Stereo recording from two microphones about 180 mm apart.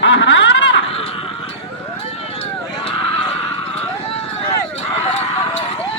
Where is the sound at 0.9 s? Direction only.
35° left (ahead or behind).